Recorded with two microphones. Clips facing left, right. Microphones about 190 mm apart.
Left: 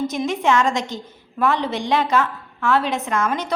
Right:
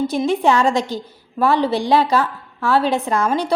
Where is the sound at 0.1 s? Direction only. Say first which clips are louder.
Right 3 dB; 35° right (ahead or behind).